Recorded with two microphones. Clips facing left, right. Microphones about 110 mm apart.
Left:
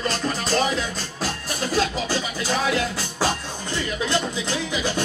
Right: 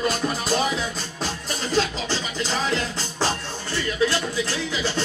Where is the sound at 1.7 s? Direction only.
10° left (ahead or behind).